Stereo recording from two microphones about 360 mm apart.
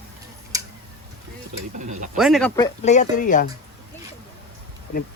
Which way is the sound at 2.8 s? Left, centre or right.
Centre.